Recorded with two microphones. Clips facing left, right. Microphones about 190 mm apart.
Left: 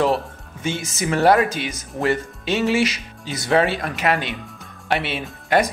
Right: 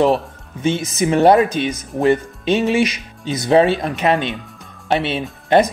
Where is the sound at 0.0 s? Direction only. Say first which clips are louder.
Right 4 dB; 20° right (ahead or behind).